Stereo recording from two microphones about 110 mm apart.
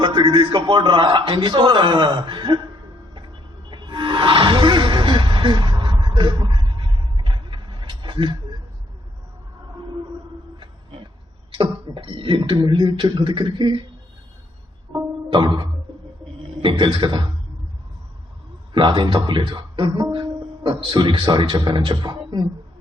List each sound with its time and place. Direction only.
0.0 s speech: 40° right (ahead or behind)
3.7 s music: 45° right (ahead or behind)
11.5 s speech: 50° right (ahead or behind)
15.3 s speech: 45° right (ahead or behind)
18.7 s speech: 50° right (ahead or behind)